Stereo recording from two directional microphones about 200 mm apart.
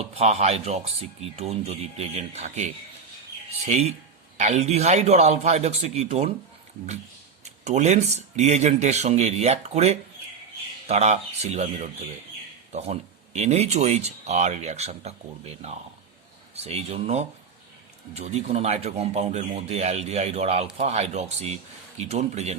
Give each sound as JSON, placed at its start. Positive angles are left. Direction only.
{"t": 0.0, "sound": "speech", "side_deg": -30}
{"t": 4.4, "sound": "speech", "side_deg": -35}
{"t": 7.4, "sound": "speech", "side_deg": -35}